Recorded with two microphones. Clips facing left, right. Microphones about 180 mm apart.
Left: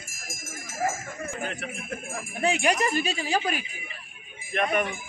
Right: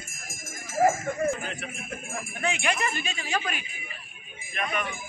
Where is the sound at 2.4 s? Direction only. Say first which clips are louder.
Left 5 dB; 40° left (ahead or behind).